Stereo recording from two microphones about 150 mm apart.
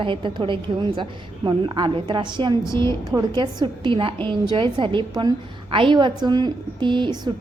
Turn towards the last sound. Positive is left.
turn(degrees=-30)  # may be behind; listen again after turning